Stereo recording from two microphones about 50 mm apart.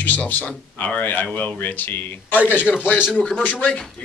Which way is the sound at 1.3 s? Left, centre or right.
Left.